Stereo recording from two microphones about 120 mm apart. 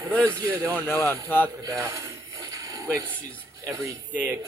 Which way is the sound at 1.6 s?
30° right (ahead or behind).